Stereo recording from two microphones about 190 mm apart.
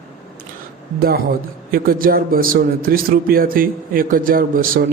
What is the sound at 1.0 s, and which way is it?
A man's voice, 50° right (ahead or behind).